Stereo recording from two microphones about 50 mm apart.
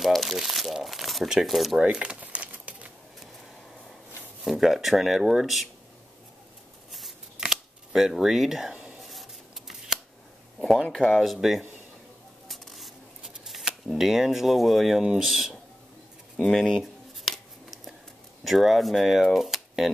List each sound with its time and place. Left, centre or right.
0.0 s crumpling: centre
0.4 s speech: centre
2.0 s crumpling: right
4.5 s speech: centre
7.9 s a sound: centre
10.9 s speech: centre
12.4 s a sound: centre
18.4 s speech: centre